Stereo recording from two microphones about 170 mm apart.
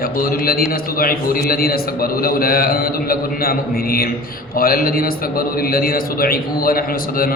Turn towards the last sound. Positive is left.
turn(degrees=60)  # may be behind; listen again after turning